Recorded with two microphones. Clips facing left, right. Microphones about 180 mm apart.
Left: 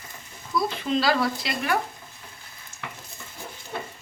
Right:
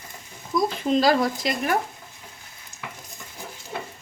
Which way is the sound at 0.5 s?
15° right (ahead or behind).